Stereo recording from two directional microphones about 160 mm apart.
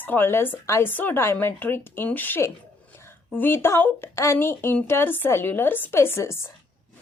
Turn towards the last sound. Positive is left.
turn(degrees=15)  # may be behind; listen again after turning